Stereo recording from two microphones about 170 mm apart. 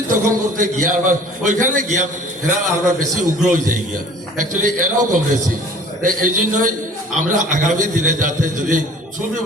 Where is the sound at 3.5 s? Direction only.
50° right (ahead or behind).